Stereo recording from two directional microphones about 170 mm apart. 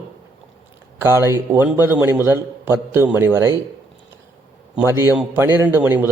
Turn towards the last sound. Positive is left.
turn(degrees=-10)  # may be behind; listen again after turning